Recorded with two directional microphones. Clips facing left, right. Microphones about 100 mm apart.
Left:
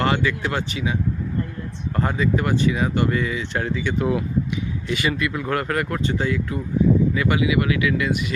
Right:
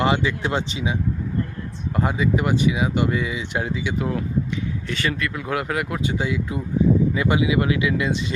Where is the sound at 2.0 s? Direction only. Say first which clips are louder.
Even; 10° right (ahead or behind).